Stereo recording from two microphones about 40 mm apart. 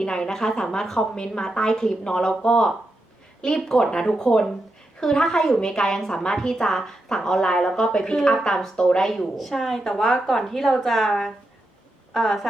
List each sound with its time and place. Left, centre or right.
0.0 s a woman's voice: centre
3.7 s a woman's voice: centre
4.2 s a woman's voice: centre
8.7 s speech: left
9.0 s a woman's voice: centre
9.8 s a woman's voice: centre